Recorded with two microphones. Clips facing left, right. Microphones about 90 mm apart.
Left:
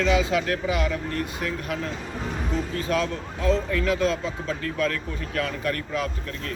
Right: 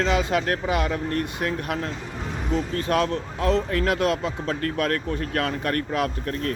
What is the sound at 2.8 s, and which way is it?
Speech, 55° right (ahead or behind).